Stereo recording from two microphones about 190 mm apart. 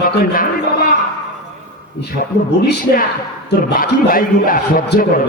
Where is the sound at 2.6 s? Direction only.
60° left (ahead or behind).